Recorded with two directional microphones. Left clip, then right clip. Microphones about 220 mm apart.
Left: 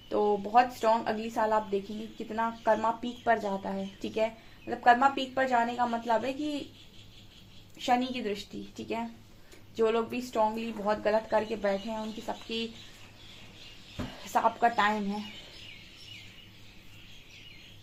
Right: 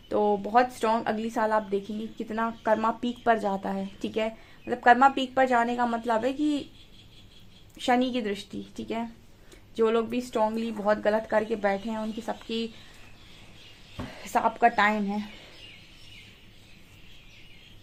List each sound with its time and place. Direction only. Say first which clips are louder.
0.1 s speech: right 2 dB; 40° right (ahead or behind)
7.8 s a woman's voice: right 3 dB; 45° right (ahead or behind)
14.3 s speech: right 3 dB; 45° right (ahead or behind)